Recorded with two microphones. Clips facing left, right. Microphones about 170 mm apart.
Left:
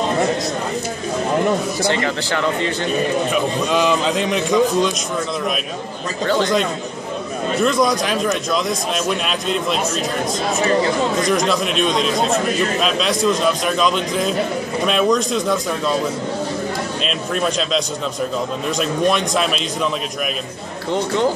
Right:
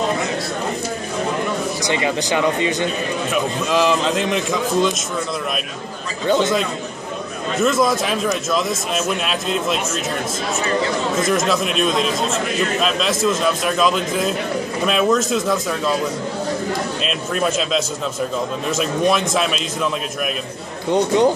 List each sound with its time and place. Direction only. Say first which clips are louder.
1.9 s speech: right 2 dB; 15° right (ahead or behind)
3.7 s speech: right 1 dB; centre (ahead or behind)
7.6 s speech: right 1 dB; 5° right (ahead or behind)
11.1 s speech: left 1 dB; 5° right (ahead or behind)
17.0 s speech: left 2 dB; 5° right (ahead or behind)
20.9 s speech: right 3 dB; 15° right (ahead or behind)